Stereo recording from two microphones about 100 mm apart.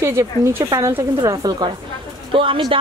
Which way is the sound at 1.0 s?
40° right (ahead or behind).